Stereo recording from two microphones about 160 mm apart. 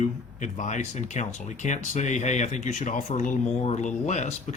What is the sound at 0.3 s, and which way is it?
Speech, 50° left (ahead or behind).